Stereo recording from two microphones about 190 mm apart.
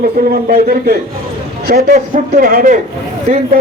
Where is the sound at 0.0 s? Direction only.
55° right (ahead or behind).